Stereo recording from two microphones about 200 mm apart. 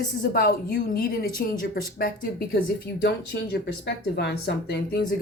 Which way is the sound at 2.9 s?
55° left (ahead or behind).